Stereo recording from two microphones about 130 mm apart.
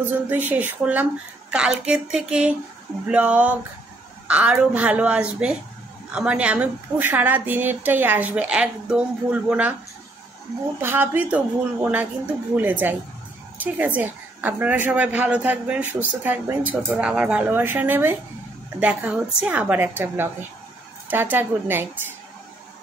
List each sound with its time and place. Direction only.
0.5 s a woman's voice: 15° right (ahead or behind)
10.8 s a woman's voice: 15° right (ahead or behind)